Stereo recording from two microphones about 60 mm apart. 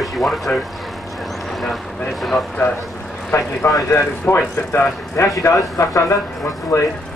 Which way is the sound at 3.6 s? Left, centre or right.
Left.